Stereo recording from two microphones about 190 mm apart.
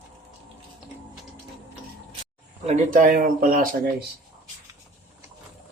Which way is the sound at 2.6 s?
45° right (ahead or behind).